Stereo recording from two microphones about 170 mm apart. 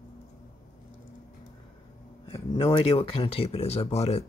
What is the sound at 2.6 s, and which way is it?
Speech, 35° left (ahead or behind).